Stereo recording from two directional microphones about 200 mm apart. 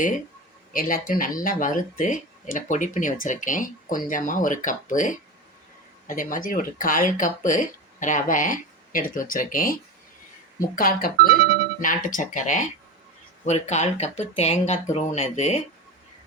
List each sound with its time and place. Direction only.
0.7 s speech: 40° left (ahead or behind)
10.8 s speech: 45° left (ahead or behind)